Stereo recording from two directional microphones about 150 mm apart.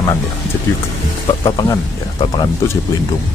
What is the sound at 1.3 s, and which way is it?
Speech, 25° left (ahead or behind).